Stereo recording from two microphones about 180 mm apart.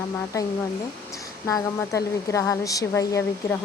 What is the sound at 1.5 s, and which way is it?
Speech, 20° left (ahead or behind).